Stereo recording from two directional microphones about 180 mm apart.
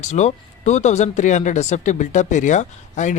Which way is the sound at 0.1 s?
40° left (ahead or behind).